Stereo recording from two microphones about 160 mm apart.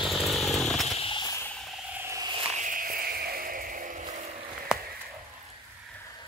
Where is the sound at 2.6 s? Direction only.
60° right (ahead or behind).